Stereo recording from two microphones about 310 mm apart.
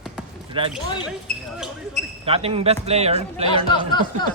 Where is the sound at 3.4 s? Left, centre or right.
Centre.